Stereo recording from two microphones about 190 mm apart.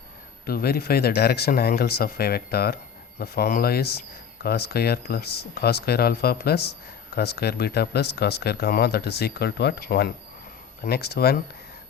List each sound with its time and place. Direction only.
0.4 s speech: 55° left (ahead or behind)